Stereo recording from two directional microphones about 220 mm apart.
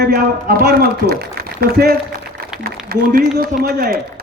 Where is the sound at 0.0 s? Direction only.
40° right (ahead or behind).